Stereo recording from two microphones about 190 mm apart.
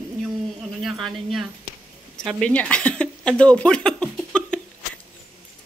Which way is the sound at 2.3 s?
5° left (ahead or behind).